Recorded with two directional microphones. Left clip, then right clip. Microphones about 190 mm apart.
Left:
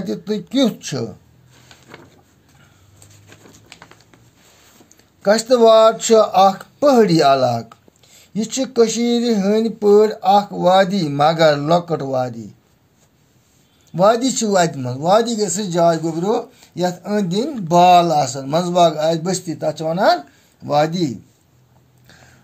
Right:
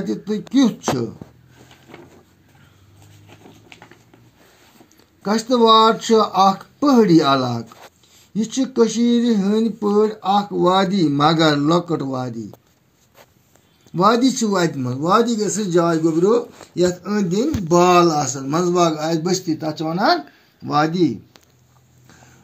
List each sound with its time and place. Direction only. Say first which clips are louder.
0.0 s speech: left 1 dB; 40° left (ahead or behind)
5.2 s speech: left 4 dB; 40° left (ahead or behind)
13.9 s speech: left 1 dB; 40° left (ahead or behind)
18.3 s speech: left 1 dB; 35° left (ahead or behind)